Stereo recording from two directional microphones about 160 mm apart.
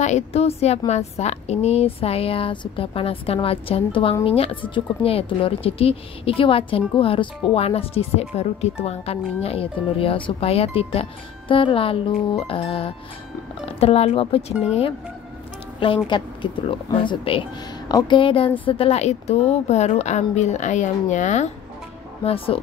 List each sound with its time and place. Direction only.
0.0 s a woman's voice: 45° left (ahead or behind)
14.5 s speech: 5° right (ahead or behind)
16.1 s a woman's voice: 30° left (ahead or behind); by 21.5 s 50° left (ahead or behind)
22.2 s a woman's voice: 35° left (ahead or behind)